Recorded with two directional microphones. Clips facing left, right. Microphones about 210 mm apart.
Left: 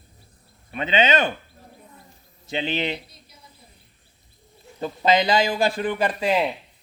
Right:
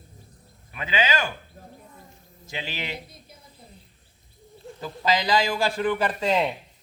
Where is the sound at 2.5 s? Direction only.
25° left (ahead or behind).